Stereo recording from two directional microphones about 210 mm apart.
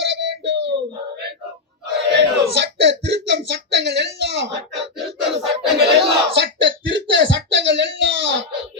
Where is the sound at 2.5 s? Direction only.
55° right (ahead or behind).